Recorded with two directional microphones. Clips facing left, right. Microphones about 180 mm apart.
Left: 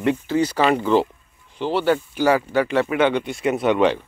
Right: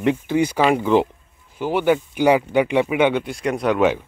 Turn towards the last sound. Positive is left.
turn(degrees=-5)  # may be behind; listen again after turning